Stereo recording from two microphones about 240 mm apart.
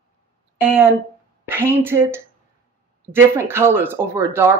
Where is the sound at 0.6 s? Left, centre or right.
Centre.